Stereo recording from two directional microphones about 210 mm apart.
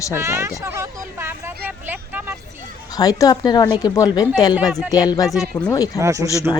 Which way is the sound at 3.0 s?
15° left (ahead or behind).